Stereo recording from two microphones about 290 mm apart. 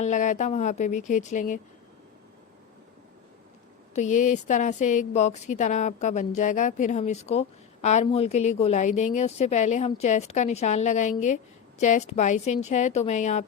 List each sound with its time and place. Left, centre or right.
0.0 s speech: left
3.9 s speech: left